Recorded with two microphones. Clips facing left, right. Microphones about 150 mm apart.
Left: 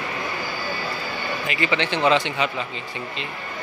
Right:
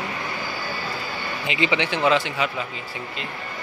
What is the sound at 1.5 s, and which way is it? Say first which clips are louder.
Speech: right 1 dB; 20° right (ahead or behind).